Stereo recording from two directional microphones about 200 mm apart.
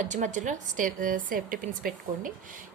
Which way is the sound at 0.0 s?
40° right (ahead or behind).